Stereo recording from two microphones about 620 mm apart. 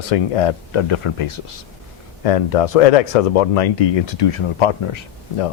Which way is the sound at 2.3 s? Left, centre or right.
Left.